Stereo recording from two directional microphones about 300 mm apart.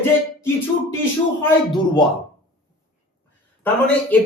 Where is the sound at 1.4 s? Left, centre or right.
Centre.